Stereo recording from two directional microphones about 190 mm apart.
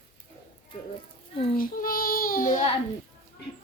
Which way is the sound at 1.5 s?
45° left (ahead or behind).